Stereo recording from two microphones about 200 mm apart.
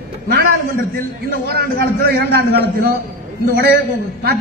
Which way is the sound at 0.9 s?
50° right (ahead or behind).